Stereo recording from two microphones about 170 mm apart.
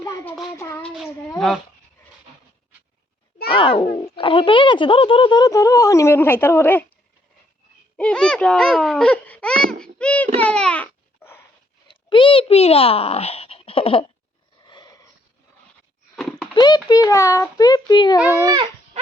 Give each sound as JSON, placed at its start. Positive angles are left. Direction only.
{"t": 0.0, "sound": "child singing", "side_deg": 20}
{"t": 0.9, "sound": "child singing", "side_deg": 0}
{"t": 1.4, "sound": "speech", "side_deg": 0}
{"t": 3.5, "sound": "a child's voice", "side_deg": 30}
{"t": 7.9, "sound": "speech", "side_deg": 5}
{"t": 9.8, "sound": "child singing", "side_deg": 5}
{"t": 10.4, "sound": "babbling", "side_deg": 5}
{"t": 11.9, "sound": "a child's voice", "side_deg": 30}
{"t": 14.6, "sound": "dog", "side_deg": 25}
{"t": 16.1, "sound": "a sound", "side_deg": 5}
{"t": 16.6, "sound": "speech", "side_deg": 25}
{"t": 18.4, "sound": "baby cry", "side_deg": -25}